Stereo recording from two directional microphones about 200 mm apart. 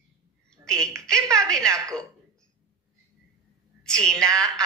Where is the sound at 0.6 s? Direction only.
5° left (ahead or behind).